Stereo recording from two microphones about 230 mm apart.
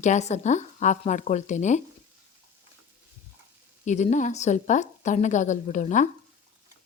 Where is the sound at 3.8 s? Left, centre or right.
Left.